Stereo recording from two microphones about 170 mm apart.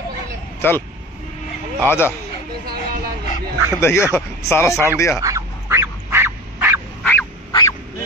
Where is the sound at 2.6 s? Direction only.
60° right (ahead or behind).